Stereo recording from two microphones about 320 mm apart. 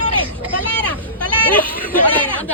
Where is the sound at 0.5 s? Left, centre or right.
Centre.